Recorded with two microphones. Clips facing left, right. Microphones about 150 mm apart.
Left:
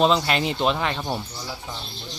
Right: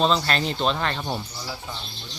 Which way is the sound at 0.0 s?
10° left (ahead or behind).